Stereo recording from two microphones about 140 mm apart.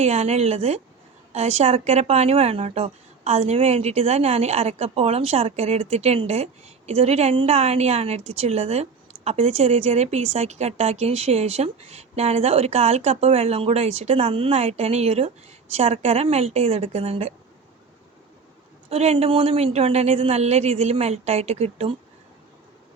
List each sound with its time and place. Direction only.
0.0 s speech: 50° right (ahead or behind)
18.9 s speech: 45° right (ahead or behind)